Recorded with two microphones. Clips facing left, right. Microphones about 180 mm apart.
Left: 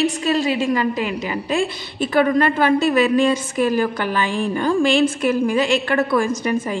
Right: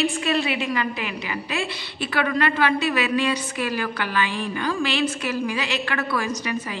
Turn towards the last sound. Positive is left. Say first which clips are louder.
# left 7 dB
turn(degrees=50)  # may be behind; listen again after turning